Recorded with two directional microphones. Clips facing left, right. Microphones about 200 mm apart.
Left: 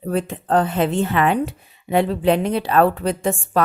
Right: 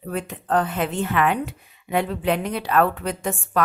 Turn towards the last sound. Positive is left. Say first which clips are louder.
# left 4 dB
turn(degrees=30)  # may be behind; listen again after turning